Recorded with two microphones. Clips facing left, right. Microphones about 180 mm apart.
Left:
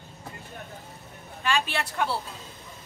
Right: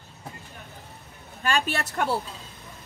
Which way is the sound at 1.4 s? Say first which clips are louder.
Right 1 dB; 40° right (ahead or behind).